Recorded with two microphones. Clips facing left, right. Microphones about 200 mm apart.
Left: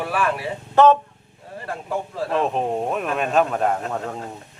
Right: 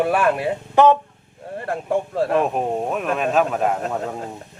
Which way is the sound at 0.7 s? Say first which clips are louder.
Even; 15° right (ahead or behind).